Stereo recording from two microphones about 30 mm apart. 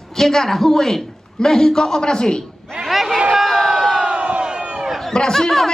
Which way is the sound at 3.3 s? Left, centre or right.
Centre.